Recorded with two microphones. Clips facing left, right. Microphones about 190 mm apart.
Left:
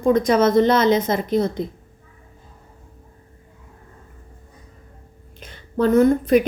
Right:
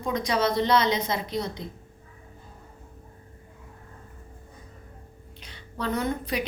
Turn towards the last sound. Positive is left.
turn(degrees=50)  # may be behind; listen again after turning